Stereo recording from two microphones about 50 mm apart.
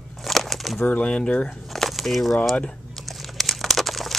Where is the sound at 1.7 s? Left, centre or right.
Centre.